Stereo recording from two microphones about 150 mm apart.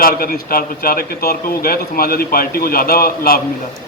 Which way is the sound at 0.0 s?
75° left (ahead or behind).